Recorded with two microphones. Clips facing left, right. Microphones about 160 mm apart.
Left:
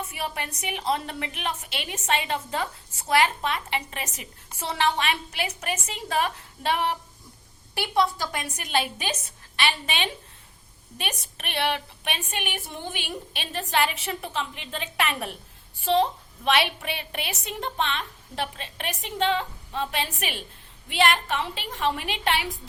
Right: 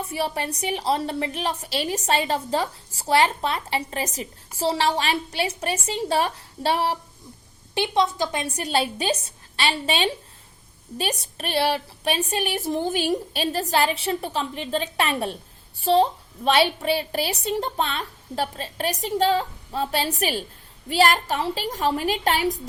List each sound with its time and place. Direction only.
0.0 s a woman's voice: 35° right (ahead or behind)
7.8 s a woman's voice: 20° right (ahead or behind); by 22.6 s 40° right (ahead or behind)